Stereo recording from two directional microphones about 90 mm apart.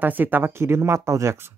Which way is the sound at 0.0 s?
20° right (ahead or behind).